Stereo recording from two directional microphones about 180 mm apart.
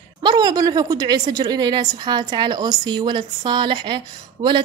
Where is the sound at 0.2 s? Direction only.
25° right (ahead or behind).